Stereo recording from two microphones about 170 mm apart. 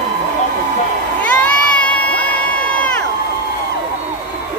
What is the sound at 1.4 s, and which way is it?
Crowd, 10° left (ahead or behind).